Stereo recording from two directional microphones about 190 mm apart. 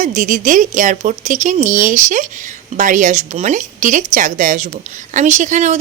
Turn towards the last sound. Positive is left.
turn(degrees=-35)  # may be behind; listen again after turning